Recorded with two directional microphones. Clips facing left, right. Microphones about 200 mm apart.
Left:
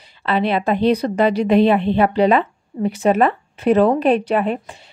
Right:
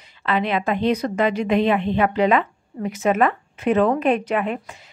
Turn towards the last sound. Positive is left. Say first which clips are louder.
# left 4 dB
turn(degrees=30)  # may be behind; listen again after turning